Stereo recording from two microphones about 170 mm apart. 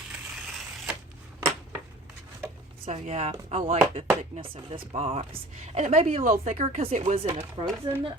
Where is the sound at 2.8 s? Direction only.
40° right (ahead or behind).